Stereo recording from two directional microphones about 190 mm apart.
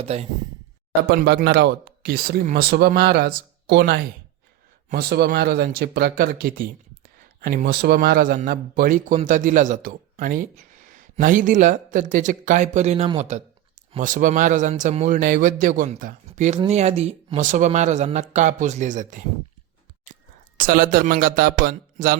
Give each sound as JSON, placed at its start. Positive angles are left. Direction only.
{"t": 0.0, "sound": "speech", "side_deg": -35}
{"t": 1.0, "sound": "a man's voice", "side_deg": -55}
{"t": 20.6, "sound": "a man's voice", "side_deg": -50}